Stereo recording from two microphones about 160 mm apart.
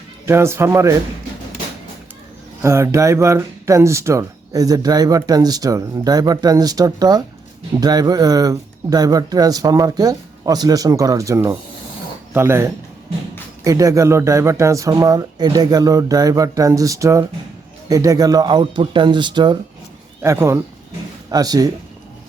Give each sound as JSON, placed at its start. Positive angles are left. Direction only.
{"t": 0.3, "sound": "speech", "side_deg": -15}
{"t": 2.6, "sound": "speech", "side_deg": -15}
{"t": 20.2, "sound": "speech", "side_deg": -15}